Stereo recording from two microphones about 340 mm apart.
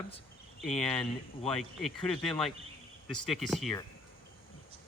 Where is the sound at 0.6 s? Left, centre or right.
Centre.